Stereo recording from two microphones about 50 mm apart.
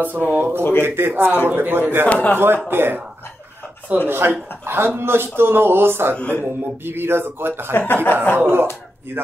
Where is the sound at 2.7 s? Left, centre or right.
Right.